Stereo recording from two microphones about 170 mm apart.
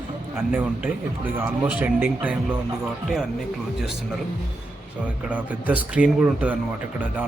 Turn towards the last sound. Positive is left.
turn(degrees=-10)  # may be behind; listen again after turning